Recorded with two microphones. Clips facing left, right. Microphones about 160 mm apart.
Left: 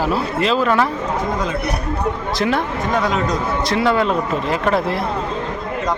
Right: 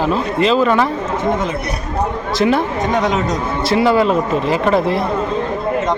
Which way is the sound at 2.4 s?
Centre (ahead or behind).